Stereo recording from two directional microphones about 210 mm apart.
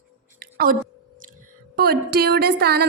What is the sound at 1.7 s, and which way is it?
A woman's voice, 45° right (ahead or behind).